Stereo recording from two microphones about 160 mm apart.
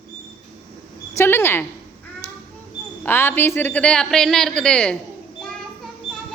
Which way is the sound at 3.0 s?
15° left (ahead or behind).